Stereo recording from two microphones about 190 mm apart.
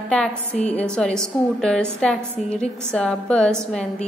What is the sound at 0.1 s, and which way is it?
A woman's voice, 5° left (ahead or behind).